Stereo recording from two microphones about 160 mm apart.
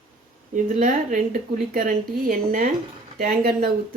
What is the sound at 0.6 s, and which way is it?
A woman's voice, 55° right (ahead or behind).